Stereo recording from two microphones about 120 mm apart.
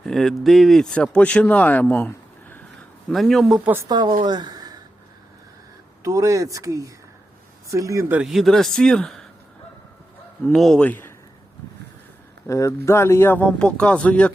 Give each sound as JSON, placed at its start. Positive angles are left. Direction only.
{"t": 0.0, "sound": "speech", "side_deg": 0}
{"t": 3.1, "sound": "a man's voice", "side_deg": 0}
{"t": 3.8, "sound": "a woman's voice", "side_deg": -40}
{"t": 6.0, "sound": "speech", "side_deg": -25}
{"t": 8.2, "sound": "a man's voice", "side_deg": 0}
{"t": 10.4, "sound": "speech", "side_deg": 5}
{"t": 12.5, "sound": "speech", "side_deg": 25}